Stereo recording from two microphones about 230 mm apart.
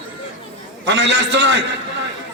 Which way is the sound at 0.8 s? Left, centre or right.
Right.